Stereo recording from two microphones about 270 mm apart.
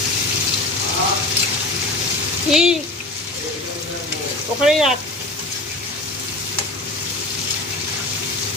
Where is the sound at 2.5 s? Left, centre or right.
Centre.